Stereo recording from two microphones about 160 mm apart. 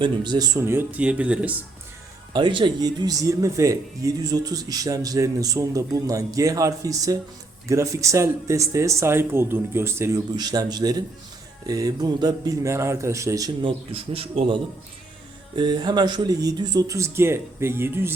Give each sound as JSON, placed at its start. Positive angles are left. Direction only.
{"t": 0.0, "sound": "speech", "side_deg": -25}
{"t": 2.3, "sound": "speech", "side_deg": -30}